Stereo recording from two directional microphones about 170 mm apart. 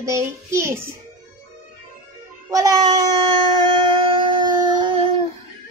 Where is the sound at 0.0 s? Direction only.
15° right (ahead or behind).